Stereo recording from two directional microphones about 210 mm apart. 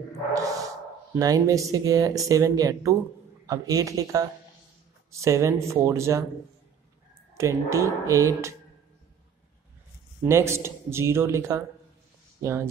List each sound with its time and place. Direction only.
0.3 s a sound: 15° right (ahead or behind)
1.1 s speech: 15° right (ahead or behind)
7.3 s speech: 15° right (ahead or behind)
10.2 s speech: 10° right (ahead or behind)